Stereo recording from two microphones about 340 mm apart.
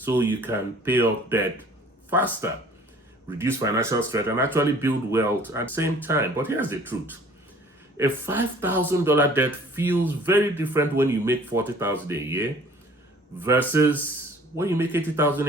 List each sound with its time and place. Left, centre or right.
0.0 s speech: centre
7.9 s speech: centre